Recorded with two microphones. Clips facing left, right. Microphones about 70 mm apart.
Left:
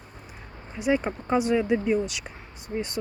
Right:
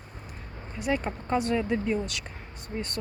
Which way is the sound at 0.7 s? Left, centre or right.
Centre.